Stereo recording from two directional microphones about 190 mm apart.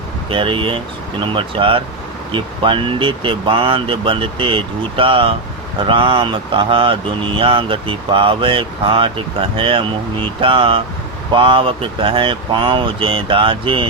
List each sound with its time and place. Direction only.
0.3 s speech: 25° right (ahead or behind)